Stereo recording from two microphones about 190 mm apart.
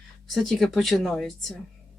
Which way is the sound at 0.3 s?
Centre (ahead or behind).